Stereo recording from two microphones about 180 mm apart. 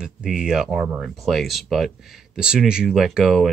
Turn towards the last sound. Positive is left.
turn(degrees=0)  # may be behind; listen again after turning